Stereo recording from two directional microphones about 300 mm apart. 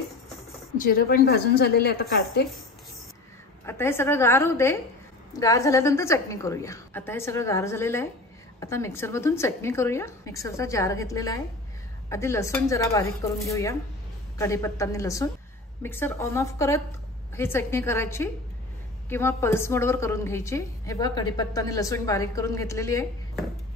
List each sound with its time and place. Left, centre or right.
0.7 s a woman's voice: left
3.6 s a woman's voice: centre